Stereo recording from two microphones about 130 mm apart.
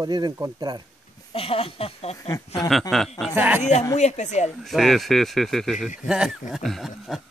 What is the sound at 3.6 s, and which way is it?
Speech, 60° left (ahead or behind).